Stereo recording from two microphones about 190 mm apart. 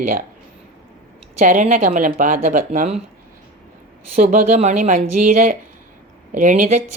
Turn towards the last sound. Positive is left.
turn(degrees=-40)  # may be behind; listen again after turning